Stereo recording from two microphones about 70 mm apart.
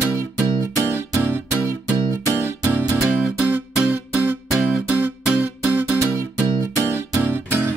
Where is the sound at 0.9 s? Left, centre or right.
Right.